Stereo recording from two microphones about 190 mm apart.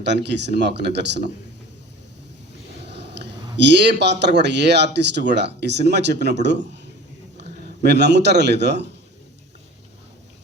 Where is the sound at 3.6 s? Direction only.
65° right (ahead or behind).